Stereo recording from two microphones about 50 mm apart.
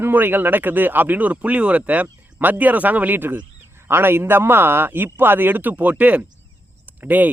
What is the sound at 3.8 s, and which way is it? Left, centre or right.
Speech, right.